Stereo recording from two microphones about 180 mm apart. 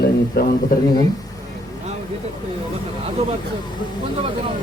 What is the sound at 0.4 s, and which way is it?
Speech, 60° left (ahead or behind).